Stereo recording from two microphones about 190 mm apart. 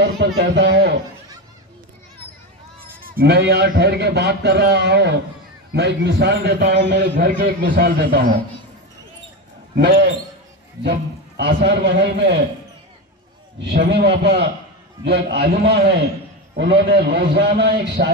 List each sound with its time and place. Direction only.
0.2 s a man's voice: 65° right (ahead or behind)
2.8 s a man's voice: 50° right (ahead or behind)
7.0 s a man's voice: 50° right (ahead or behind)
7.3 s a man's voice: 65° right (ahead or behind)
9.8 s a man's voice: 50° right (ahead or behind)
10.8 s a man's voice: 60° right (ahead or behind)
13.6 s a man's voice: 60° right (ahead or behind)